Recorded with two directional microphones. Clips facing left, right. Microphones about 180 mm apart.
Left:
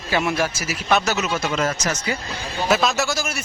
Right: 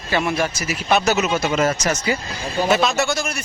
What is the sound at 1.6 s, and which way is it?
Speech, 30° right (ahead or behind).